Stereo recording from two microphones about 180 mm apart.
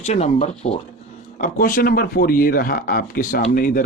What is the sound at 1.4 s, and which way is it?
Speech, 50° left (ahead or behind).